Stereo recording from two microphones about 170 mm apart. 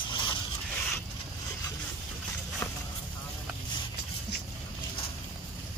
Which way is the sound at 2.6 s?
20° left (ahead or behind).